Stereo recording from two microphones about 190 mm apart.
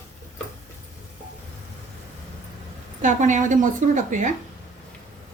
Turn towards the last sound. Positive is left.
turn(degrees=-40)  # may be behind; listen again after turning